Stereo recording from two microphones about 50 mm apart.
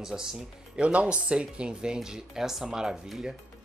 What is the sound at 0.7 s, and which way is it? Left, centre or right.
Speech, right.